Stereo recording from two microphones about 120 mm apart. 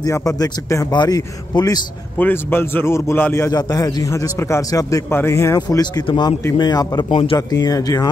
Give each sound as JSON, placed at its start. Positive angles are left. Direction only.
{"t": 0.0, "sound": "a man's voice", "side_deg": 30}
{"t": 2.1, "sound": "a man's voice", "side_deg": 15}
{"t": 3.5, "sound": "a man's voice", "side_deg": 30}